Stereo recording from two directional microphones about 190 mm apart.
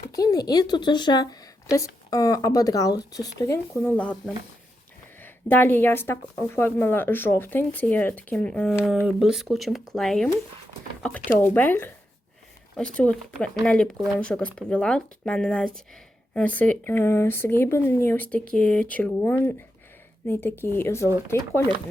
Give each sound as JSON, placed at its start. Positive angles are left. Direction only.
{"t": 0.1, "sound": "speech", "side_deg": 20}
{"t": 5.2, "sound": "speech", "side_deg": 10}